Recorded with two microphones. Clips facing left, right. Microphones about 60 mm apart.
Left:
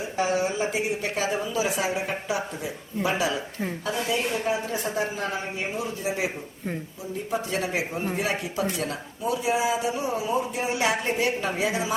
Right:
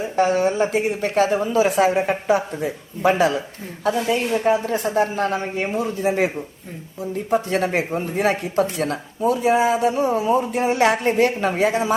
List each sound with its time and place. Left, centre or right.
0.2 s a woman's voice: right